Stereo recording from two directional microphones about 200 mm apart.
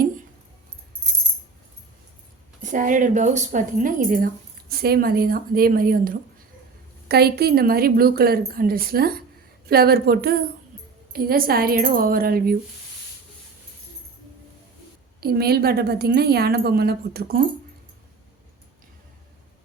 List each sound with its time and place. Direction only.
2.6 s a woman's voice: 40° right (ahead or behind)
15.2 s a woman's voice: 50° right (ahead or behind)